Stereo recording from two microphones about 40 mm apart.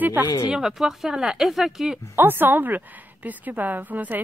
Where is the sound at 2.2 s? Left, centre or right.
Right.